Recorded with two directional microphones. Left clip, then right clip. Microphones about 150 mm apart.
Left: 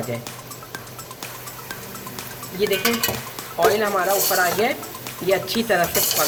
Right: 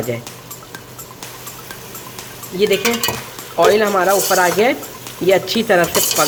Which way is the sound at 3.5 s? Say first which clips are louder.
Right 6 dB; 55° right (ahead or behind).